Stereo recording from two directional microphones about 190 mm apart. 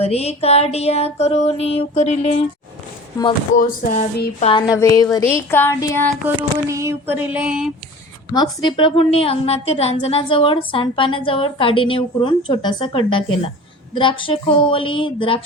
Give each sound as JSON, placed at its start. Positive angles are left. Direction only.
{"t": 0.0, "sound": "music", "side_deg": 30}
{"t": 3.5, "sound": "music", "side_deg": 45}
{"t": 4.5, "sound": "a woman's voice", "side_deg": 20}
{"t": 6.3, "sound": "a sound", "side_deg": -15}
{"t": 8.3, "sound": "a woman's voice", "side_deg": 20}